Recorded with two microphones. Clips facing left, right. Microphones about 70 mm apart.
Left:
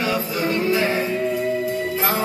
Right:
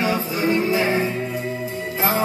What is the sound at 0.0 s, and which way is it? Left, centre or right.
Music, right.